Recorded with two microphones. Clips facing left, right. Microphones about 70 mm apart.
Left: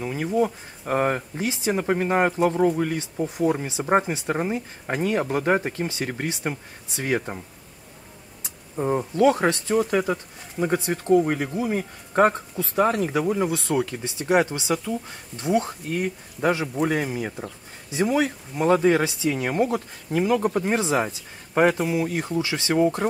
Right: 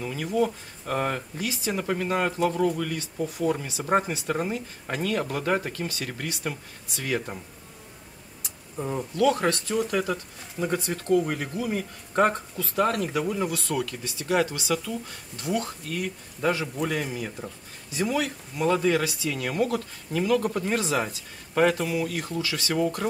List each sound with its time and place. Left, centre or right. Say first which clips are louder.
0.0 s speech: left 3 dB; left
8.4 s a sound: left 6 dB; left
9.1 s speech: left 3 dB; left